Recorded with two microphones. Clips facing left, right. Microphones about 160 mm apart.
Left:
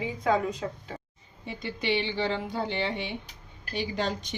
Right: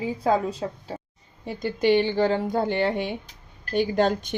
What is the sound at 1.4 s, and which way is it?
A woman's voice, 45° right (ahead or behind).